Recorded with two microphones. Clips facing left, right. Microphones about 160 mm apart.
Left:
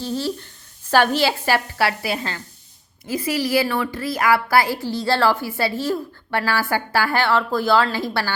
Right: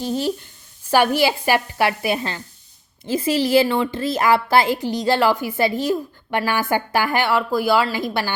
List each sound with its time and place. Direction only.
0.0 s a woman's voice: 15° right (ahead or behind)